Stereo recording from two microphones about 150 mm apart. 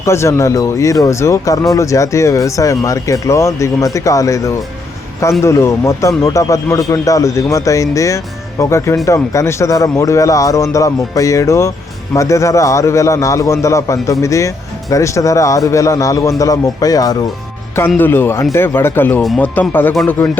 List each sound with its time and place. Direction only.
0.0 s a man's voice: 20° left (ahead or behind)
17.7 s speech: 10° left (ahead or behind)